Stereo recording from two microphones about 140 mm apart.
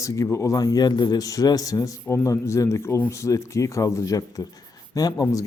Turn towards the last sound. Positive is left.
turn(degrees=25)  # may be behind; listen again after turning